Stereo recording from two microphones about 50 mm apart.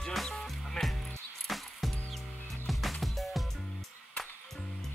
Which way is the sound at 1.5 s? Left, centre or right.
Centre.